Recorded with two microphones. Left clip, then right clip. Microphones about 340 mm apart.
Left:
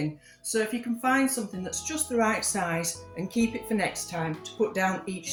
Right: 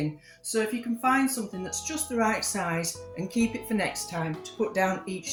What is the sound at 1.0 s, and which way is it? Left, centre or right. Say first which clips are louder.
Speech: right 1 dB; right.